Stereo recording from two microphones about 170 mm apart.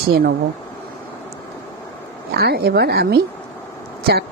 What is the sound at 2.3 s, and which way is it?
Speech, 70° right (ahead or behind).